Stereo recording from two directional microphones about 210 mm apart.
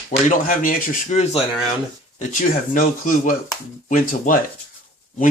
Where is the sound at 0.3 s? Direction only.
40° left (ahead or behind).